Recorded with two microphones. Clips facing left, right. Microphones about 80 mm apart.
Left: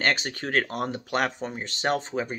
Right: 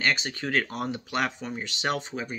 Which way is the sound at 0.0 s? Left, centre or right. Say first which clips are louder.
Left 1 dB; left.